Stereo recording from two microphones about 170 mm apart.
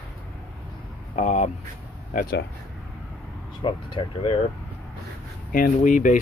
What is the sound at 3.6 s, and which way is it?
Speech, 30° left (ahead or behind).